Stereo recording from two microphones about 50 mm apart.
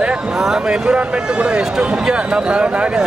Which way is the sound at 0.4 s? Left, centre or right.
Centre.